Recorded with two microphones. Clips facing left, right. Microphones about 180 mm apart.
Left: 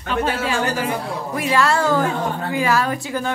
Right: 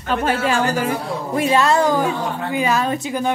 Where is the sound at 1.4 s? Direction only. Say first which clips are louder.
Right 3 dB; 25° right (ahead or behind).